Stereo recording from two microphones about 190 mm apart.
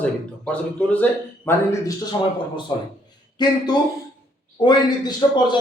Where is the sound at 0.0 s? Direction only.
5° left (ahead or behind).